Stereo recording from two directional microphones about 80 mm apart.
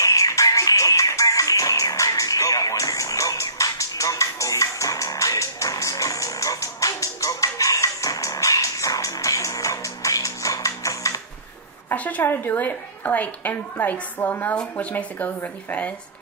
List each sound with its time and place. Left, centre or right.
0.0 s music: left
11.9 s a woman's voice: centre